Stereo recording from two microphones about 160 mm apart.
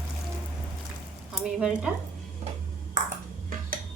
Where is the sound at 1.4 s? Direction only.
Centre (ahead or behind).